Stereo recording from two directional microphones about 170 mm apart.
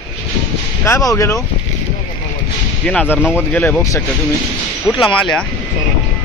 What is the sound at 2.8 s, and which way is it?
Speech, 10° left (ahead or behind).